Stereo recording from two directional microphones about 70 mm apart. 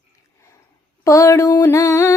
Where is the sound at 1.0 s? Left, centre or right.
Left.